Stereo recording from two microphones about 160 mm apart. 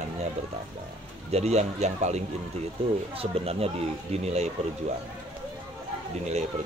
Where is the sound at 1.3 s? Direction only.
40° right (ahead or behind).